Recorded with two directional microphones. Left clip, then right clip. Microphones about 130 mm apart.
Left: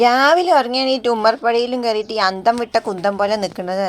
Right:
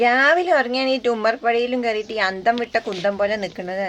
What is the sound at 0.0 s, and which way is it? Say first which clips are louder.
A woman's voice: left 3 dB; 35° left (ahead or behind).